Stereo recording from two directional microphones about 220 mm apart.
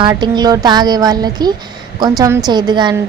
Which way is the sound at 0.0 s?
20° right (ahead or behind).